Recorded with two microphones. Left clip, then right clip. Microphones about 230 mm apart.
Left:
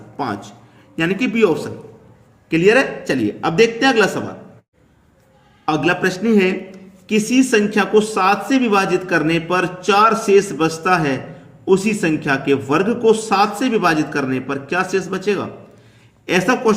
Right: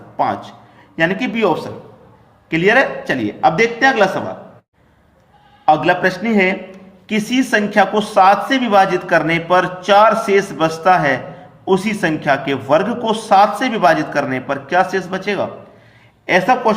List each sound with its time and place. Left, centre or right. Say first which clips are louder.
0.2 s a man's voice: right 6 dB; centre
5.6 s a man's voice: right 5 dB; centre